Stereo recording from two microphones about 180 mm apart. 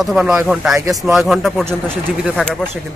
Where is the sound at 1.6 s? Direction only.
10° right (ahead or behind).